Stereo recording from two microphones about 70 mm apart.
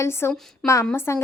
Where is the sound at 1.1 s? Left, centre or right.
Left.